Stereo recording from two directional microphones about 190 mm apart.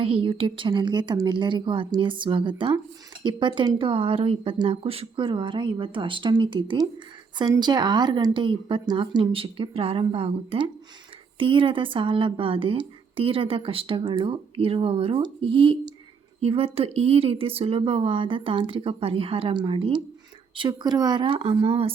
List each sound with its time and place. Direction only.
0.0 s speech: 30° right (ahead or behind)